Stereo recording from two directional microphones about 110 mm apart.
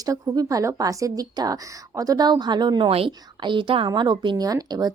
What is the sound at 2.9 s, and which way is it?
Speech, 60° right (ahead or behind).